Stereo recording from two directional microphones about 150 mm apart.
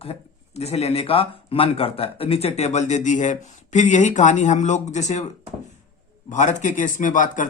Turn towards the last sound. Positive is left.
turn(degrees=60)  # may be behind; listen again after turning